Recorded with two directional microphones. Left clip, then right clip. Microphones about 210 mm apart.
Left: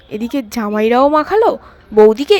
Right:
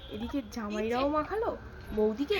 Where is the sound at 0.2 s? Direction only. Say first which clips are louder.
Left 16 dB; 50° left (ahead or behind).